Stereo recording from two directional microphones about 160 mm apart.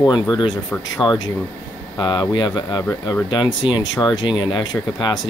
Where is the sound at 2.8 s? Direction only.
15° left (ahead or behind).